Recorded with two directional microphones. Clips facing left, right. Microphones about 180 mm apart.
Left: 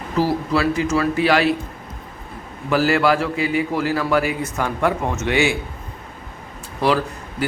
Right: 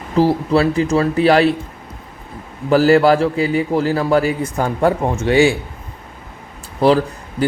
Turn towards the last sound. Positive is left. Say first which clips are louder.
# right 4 dB
turn(degrees=-30)  # may be behind; listen again after turning